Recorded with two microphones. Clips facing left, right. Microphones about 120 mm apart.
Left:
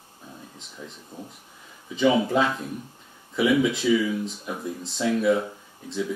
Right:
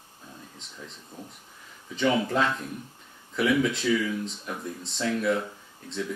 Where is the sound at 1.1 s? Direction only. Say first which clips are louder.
Left 3 dB; 15° left (ahead or behind).